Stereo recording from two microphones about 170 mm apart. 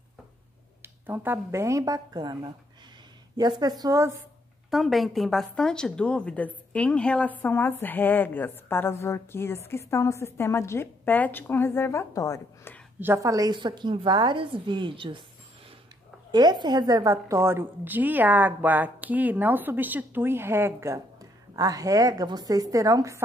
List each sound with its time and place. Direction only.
0.8 s a woman's voice: 10° right (ahead or behind)
4.6 s a woman's voice: centre (ahead or behind); by 12.7 s 20° left (ahead or behind)
13.0 s a woman's voice: 15° right (ahead or behind)
16.3 s a woman's voice: 25° right (ahead or behind)